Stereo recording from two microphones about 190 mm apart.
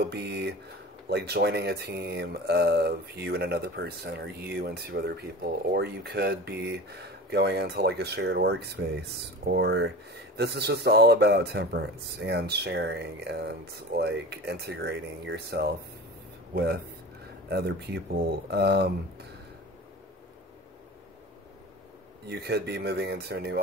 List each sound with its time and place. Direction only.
0.0 s speech: 60° right (ahead or behind)
22.2 s speech: 60° right (ahead or behind)